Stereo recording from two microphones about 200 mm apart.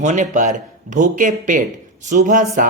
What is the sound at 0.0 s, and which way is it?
Speech, 40° right (ahead or behind).